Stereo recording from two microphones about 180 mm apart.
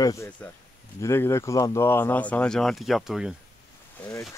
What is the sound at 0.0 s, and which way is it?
Speech, 20° left (ahead or behind).